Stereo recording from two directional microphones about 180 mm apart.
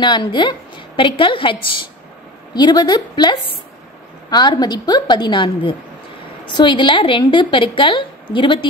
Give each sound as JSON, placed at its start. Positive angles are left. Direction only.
{"t": 0.0, "sound": "a woman's voice", "side_deg": 25}